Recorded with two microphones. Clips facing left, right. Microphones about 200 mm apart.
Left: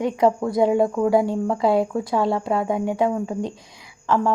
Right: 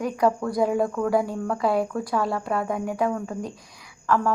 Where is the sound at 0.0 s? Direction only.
25° left (ahead or behind).